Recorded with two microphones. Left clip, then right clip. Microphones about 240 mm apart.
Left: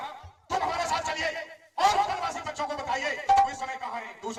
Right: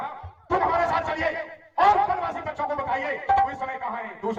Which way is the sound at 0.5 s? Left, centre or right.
Left.